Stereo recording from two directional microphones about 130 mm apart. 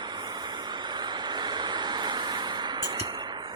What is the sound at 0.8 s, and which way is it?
Vehicle, 35° right (ahead or behind).